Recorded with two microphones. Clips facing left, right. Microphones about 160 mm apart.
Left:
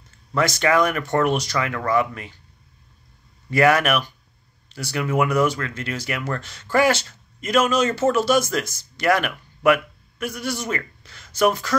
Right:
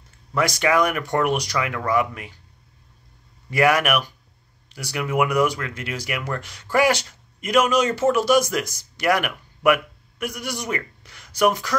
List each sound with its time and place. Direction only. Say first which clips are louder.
0.3 s speech: left 1 dB; 10° right (ahead or behind)
3.4 s speech: left 1 dB; 10° right (ahead or behind)